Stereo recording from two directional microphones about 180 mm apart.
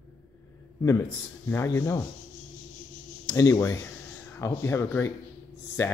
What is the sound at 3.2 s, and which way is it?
Speech, 20° left (ahead or behind).